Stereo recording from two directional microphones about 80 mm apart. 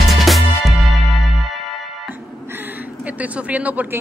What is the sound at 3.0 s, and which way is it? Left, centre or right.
Speech, centre.